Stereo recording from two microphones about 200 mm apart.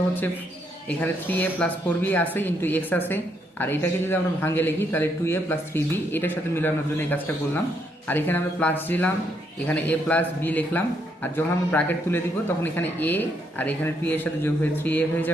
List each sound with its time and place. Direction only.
0.9 s speech: 10° left (ahead or behind)